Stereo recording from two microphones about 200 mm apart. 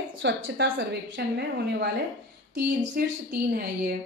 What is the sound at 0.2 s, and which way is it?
A woman's voice, 60° right (ahead or behind).